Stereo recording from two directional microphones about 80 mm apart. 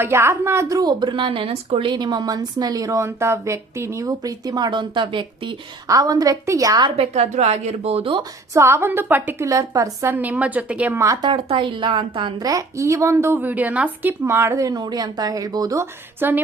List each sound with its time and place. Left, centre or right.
0.0 s a woman's voice: right
0.8 s speech: right
3.0 s speech: right
5.9 s speech: right
8.5 s a woman's voice: right
9.4 s speech: right
10.1 s speech: right
10.9 s a woman's voice: right
11.2 s a woman's voice: right
12.4 s a woman's voice: right
13.4 s speech: right
15.8 s speech: right